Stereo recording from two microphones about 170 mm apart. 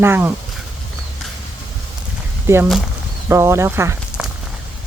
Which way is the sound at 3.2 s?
15° right (ahead or behind).